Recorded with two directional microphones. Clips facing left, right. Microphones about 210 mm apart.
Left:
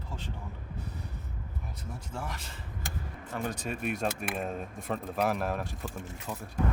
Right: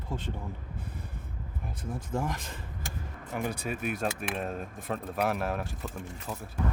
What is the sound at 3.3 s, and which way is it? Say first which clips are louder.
Speech: right 2 dB; 10° right (ahead or behind).